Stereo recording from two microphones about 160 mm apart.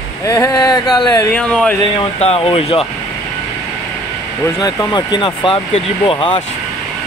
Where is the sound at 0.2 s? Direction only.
20° left (ahead or behind).